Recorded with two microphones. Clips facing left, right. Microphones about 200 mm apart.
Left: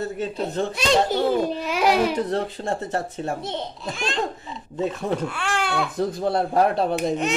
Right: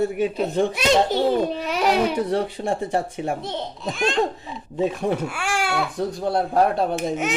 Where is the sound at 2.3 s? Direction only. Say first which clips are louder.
Right 2 dB; 10° right (ahead or behind).